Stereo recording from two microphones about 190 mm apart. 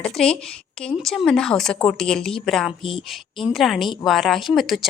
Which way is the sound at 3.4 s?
Centre (ahead or behind).